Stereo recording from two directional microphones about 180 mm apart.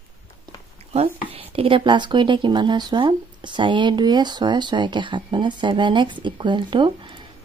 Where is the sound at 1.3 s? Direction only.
30° right (ahead or behind).